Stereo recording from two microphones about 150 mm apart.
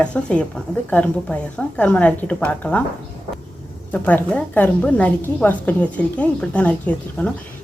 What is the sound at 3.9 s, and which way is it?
A woman's voice, 10° left (ahead or behind).